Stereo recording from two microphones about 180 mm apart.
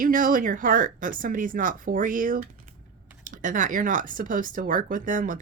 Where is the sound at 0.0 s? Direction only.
50° right (ahead or behind).